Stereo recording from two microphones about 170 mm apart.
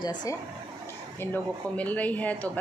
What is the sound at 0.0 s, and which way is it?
Speech, 25° left (ahead or behind).